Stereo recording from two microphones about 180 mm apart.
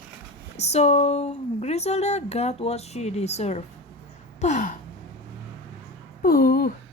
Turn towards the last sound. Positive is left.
turn(degrees=55)  # may be behind; listen again after turning